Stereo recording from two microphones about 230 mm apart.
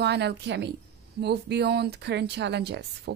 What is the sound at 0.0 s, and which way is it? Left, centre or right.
Speech, right.